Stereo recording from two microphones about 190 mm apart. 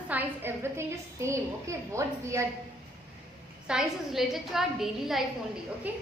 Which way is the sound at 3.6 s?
5° right (ahead or behind).